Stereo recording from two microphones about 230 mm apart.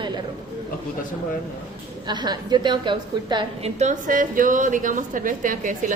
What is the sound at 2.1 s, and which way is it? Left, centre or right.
A woman's voice, centre.